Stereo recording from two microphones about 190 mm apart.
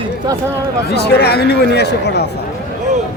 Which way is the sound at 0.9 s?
60° left (ahead or behind).